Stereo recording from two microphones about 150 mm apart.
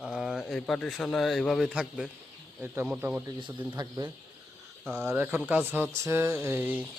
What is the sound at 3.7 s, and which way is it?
Speech, 25° right (ahead or behind).